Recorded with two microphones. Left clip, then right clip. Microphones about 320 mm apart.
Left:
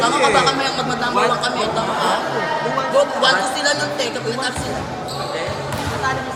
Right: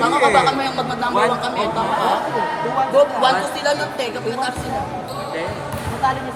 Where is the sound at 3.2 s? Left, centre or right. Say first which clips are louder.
Left 1 dB; right.